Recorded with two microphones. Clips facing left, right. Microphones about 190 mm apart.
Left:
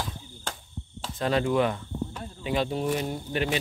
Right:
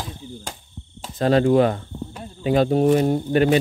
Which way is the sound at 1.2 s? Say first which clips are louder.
Right 8 dB; 35° right (ahead or behind).